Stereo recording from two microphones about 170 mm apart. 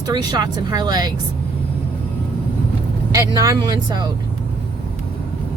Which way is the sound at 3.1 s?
20° right (ahead or behind).